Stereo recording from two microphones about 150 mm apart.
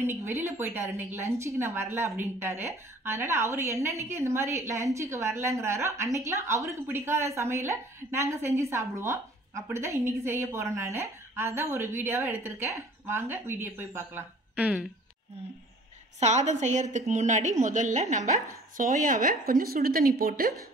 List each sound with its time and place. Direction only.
0.0 s a woman's voice: 20° right (ahead or behind)
16.2 s a woman's voice: 50° right (ahead or behind)
18.8 s speech: 65° right (ahead or behind); by 20.5 s 80° right